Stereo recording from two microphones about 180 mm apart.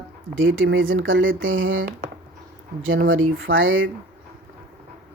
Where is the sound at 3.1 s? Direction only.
90° right.